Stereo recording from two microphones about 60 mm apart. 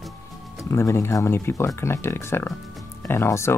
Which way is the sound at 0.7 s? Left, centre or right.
Left.